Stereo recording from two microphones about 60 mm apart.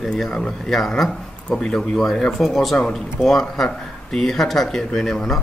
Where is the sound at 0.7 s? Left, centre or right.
Centre.